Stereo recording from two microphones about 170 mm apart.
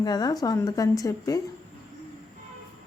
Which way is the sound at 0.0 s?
25° left (ahead or behind).